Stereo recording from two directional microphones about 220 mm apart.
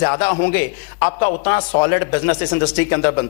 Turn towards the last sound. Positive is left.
turn(degrees=20)  # may be behind; listen again after turning